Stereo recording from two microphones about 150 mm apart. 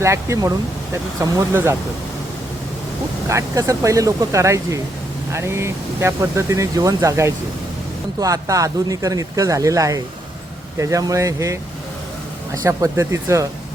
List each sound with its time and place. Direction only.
0.0 s speech: 20° right (ahead or behind)
3.2 s speech: 20° right (ahead or behind)
12.6 s speech: 20° right (ahead or behind)